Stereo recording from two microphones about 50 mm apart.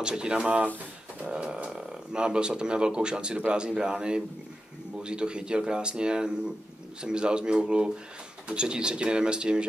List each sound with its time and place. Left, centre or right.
0.0 s speech: centre